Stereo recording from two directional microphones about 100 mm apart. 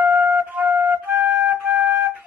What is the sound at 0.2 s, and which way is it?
Flute, 15° right (ahead or behind).